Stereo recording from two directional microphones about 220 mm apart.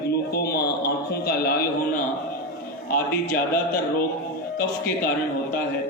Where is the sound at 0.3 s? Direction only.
45° left (ahead or behind).